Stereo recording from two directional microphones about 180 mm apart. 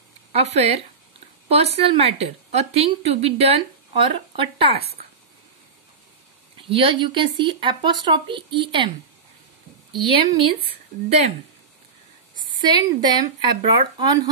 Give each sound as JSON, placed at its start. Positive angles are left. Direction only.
{"t": 0.3, "sound": "a woman's voice", "side_deg": -35}
{"t": 2.0, "sound": "a woman's voice", "side_deg": -35}
{"t": 6.7, "sound": "speech", "side_deg": -30}
{"t": 10.1, "sound": "a woman's voice", "side_deg": -30}
{"t": 12.5, "sound": "speech", "side_deg": -25}